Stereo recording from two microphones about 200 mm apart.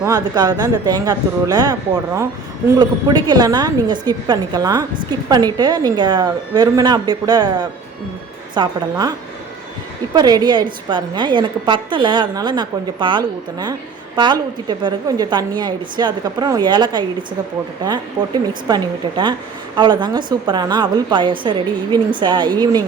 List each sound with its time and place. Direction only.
0.0 s a woman's voice: 20° right (ahead or behind)
8.5 s a woman's voice: 20° right (ahead or behind)
10.2 s a woman's voice: 20° right (ahead or behind)
18.2 s a woman's voice: 25° right (ahead or behind)